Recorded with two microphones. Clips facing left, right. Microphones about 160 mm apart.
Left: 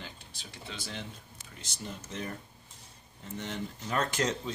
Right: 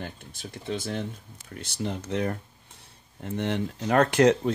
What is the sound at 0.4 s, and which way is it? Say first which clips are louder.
Speech: right 12 dB; 50° right (ahead or behind).